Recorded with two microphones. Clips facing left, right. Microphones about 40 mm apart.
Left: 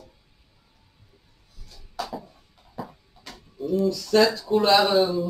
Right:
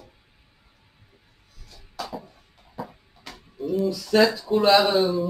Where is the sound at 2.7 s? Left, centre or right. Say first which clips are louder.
Right 1 dB; centre.